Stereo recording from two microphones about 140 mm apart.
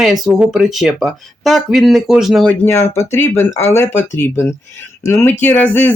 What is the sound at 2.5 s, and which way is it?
Speech, 15° left (ahead or behind).